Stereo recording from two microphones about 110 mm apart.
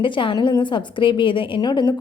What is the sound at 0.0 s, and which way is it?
A woman's voice, 50° left (ahead or behind).